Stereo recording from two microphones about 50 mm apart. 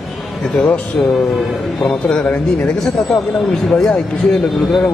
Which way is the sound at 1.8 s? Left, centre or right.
Centre.